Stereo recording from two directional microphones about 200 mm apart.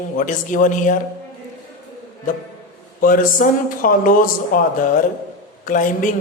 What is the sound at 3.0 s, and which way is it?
Speech, 45° left (ahead or behind).